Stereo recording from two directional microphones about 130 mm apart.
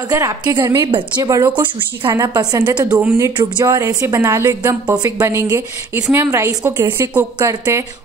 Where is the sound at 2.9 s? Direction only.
20° right (ahead or behind).